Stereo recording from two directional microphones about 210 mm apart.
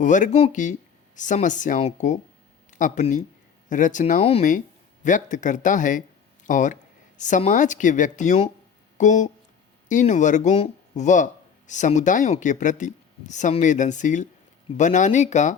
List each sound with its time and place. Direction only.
0.0 s speech: 35° left (ahead or behind)